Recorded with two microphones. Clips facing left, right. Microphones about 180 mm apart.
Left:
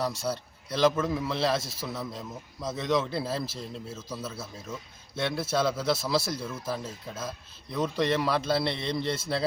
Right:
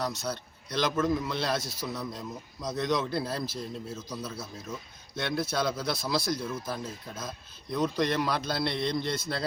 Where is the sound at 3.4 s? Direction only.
25° left (ahead or behind).